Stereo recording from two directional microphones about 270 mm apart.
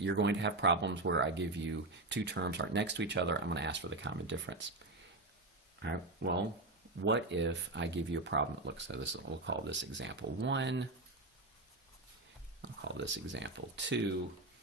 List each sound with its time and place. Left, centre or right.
0.0 s speech: right
5.8 s speech: right
12.6 s speech: right